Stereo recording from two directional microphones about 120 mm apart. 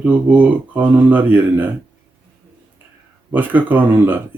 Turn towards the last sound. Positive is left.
turn(degrees=-15)  # may be behind; listen again after turning